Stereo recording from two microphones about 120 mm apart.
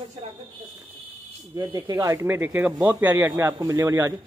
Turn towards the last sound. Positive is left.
turn(degrees=-20)  # may be behind; listen again after turning